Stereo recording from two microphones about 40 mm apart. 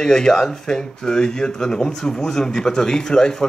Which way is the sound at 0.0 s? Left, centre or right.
Centre.